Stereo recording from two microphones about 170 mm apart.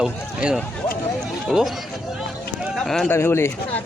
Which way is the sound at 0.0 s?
5° right (ahead or behind).